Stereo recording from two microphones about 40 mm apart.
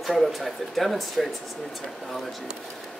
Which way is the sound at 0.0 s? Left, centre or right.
Centre.